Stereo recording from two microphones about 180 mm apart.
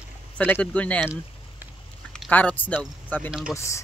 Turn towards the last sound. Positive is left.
turn(degrees=15)  # may be behind; listen again after turning